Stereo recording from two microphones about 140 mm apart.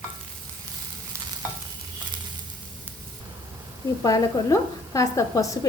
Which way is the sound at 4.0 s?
25° left (ahead or behind).